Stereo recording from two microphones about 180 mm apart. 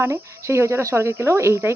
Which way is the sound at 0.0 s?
15° right (ahead or behind).